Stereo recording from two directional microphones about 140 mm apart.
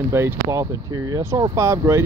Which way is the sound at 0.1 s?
15° right (ahead or behind).